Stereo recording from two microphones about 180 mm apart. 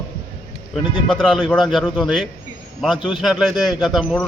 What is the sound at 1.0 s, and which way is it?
A man's voice, centre (ahead or behind).